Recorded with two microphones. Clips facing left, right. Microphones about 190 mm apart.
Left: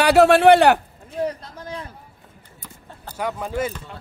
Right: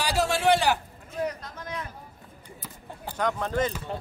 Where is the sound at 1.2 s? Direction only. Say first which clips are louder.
Left 5 dB; 30° left (ahead or behind).